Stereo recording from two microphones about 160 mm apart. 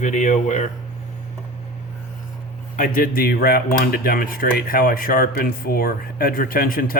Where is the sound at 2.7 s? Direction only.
60° left (ahead or behind).